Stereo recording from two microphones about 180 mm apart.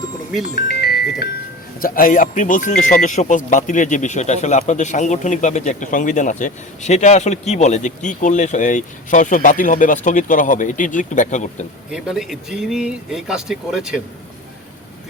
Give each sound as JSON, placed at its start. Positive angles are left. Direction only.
{"t": 0.5, "sound": "music", "side_deg": 60}
{"t": 1.8, "sound": "speech", "side_deg": 50}
{"t": 11.9, "sound": "speech", "side_deg": 0}